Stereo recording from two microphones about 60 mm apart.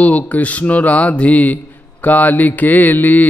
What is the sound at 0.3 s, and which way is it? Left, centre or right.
Speech, left.